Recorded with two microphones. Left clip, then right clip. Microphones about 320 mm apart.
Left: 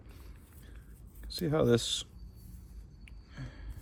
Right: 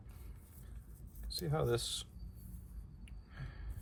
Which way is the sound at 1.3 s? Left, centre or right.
Left.